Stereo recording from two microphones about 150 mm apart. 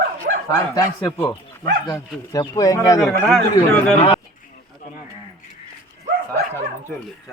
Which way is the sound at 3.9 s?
45° left (ahead or behind).